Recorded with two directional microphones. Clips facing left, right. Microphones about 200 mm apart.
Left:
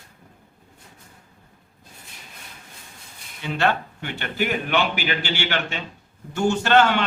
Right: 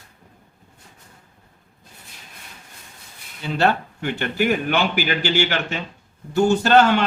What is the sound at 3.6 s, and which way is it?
Speech, 40° right (ahead or behind).